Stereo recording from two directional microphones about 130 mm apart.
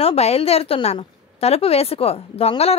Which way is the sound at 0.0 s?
50° left (ahead or behind).